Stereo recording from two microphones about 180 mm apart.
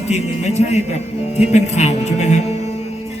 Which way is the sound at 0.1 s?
40° left (ahead or behind).